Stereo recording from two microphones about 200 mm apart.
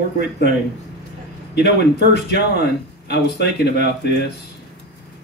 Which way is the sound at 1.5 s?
55° left (ahead or behind).